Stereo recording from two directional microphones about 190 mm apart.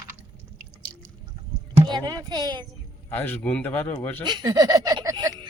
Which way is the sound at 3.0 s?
10° left (ahead or behind).